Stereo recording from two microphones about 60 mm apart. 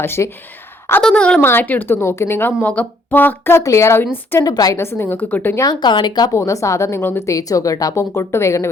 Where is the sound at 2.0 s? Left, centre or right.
Left.